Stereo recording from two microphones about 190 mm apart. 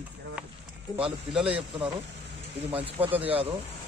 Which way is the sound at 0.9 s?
20° left (ahead or behind).